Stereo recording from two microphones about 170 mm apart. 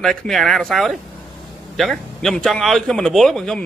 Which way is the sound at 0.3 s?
Centre (ahead or behind).